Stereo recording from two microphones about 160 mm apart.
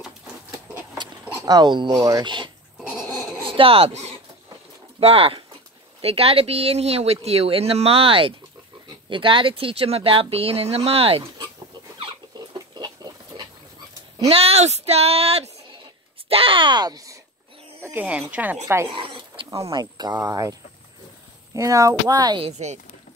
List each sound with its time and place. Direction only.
1.2 s a sound: 10° right (ahead or behind)
1.5 s speech: 25° right (ahead or behind)
2.9 s dog: centre (ahead or behind)
3.4 s speech: 35° right (ahead or behind)
12.5 s a sound: 25° right (ahead or behind)
14.3 s speech: 40° right (ahead or behind); by 17.2 s 20° right (ahead or behind)
17.8 s speech: 10° right (ahead or behind)
18.9 s speech: 35° right (ahead or behind)
21.5 s speech: 20° right (ahead or behind)